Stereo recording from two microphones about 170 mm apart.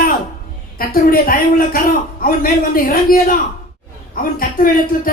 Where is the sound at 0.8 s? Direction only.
60° left (ahead or behind).